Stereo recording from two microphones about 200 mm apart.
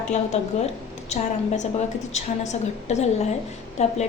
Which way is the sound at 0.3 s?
35° left (ahead or behind).